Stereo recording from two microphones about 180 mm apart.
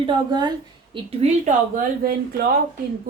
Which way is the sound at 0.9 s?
35° right (ahead or behind).